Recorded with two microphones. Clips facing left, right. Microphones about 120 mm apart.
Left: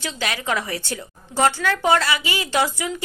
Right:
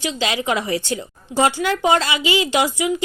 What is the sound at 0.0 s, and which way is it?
A woman's voice, 15° right (ahead or behind).